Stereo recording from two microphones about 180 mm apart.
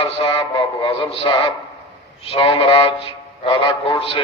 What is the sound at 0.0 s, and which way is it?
A man's voice, 30° left (ahead or behind).